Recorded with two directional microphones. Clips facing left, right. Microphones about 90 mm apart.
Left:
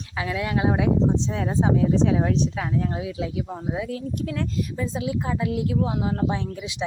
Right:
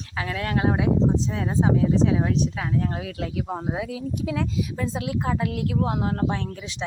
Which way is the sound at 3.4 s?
30° right (ahead or behind).